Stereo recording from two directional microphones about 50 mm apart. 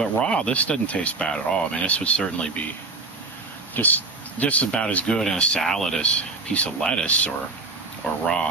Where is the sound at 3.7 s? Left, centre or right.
Left.